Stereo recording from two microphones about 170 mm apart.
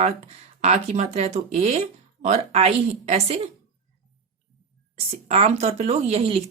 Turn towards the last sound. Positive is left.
turn(degrees=-35)  # may be behind; listen again after turning